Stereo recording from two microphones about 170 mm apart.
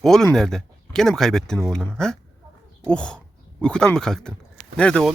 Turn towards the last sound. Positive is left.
turn(degrees=5)  # may be behind; listen again after turning